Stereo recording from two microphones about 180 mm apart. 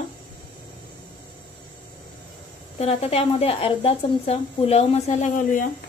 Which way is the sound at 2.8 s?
35° left (ahead or behind).